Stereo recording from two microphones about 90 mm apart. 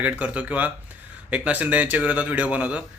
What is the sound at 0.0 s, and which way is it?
A man's voice, 15° right (ahead or behind).